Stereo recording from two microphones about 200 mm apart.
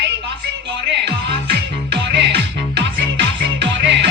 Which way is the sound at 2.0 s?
60° right (ahead or behind).